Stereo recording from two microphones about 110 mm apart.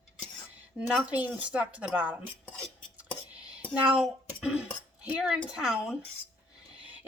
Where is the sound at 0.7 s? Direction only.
10° right (ahead or behind).